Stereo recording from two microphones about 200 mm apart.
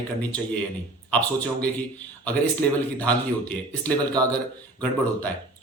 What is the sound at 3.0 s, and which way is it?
A man's voice, 5° left (ahead or behind).